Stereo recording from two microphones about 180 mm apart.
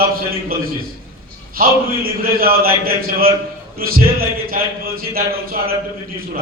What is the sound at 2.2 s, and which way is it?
A man's voice, 55° right (ahead or behind).